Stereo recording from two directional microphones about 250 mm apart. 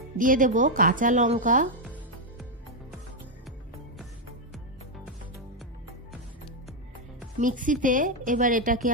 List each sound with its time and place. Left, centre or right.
0.2 s a woman's voice: right
7.3 s a woman's voice: right